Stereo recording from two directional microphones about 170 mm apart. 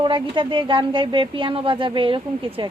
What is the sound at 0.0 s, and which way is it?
A woman's voice, 30° right (ahead or behind).